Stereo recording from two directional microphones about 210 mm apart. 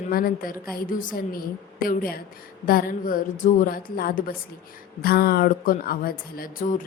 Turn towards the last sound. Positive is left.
turn(degrees=45)  # may be behind; listen again after turning